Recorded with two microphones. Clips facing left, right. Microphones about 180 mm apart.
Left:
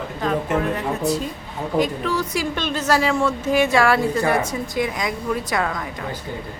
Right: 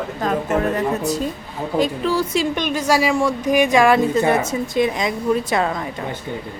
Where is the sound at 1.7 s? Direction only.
30° right (ahead or behind).